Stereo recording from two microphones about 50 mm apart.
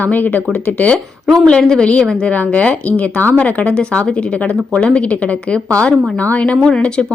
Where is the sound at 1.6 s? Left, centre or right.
Centre.